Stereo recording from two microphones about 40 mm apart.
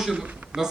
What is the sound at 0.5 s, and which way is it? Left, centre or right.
Speech, right.